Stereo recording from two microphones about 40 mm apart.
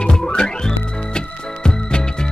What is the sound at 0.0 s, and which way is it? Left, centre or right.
Music, centre.